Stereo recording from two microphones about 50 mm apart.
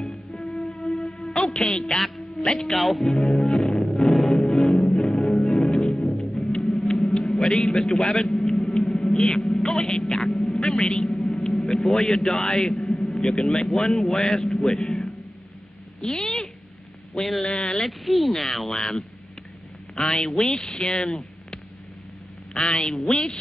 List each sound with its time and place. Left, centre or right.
0.0 s music: centre
0.4 s music: left
0.7 s music: centre
4.3 s music: centre
8.9 s a sound: centre
9.5 s a man's voice: centre
17.8 s speech: centre
22.5 s speech: centre